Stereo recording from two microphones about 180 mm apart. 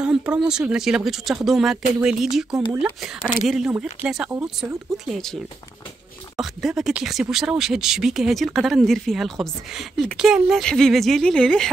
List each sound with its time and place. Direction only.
0.0 s speech: 5° right (ahead or behind)